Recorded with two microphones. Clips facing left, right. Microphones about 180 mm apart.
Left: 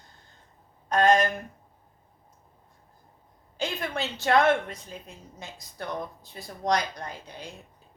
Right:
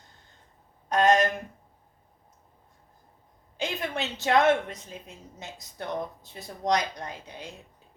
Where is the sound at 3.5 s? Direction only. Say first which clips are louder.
Even; 20° right (ahead or behind).